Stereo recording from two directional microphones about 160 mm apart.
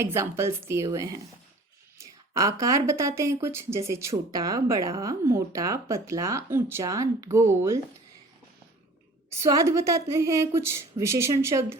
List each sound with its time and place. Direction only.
0.0 s a woman's voice: 15° right (ahead or behind)
9.4 s a woman's voice: 20° right (ahead or behind)